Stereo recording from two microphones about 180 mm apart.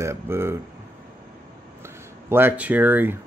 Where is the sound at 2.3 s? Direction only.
10° right (ahead or behind).